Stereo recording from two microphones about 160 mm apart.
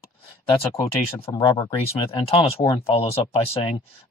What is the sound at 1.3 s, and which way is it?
Speech, 20° left (ahead or behind).